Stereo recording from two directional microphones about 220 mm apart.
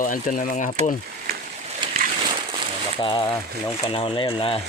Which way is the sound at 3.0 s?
20° left (ahead or behind).